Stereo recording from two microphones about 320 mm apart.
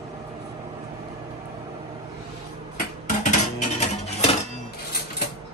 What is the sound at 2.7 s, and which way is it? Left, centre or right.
Dishes, left.